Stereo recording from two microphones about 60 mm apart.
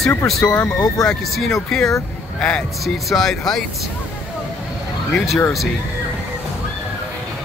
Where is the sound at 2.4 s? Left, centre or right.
Centre.